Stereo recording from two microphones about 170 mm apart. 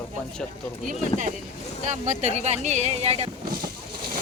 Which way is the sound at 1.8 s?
45° right (ahead or behind).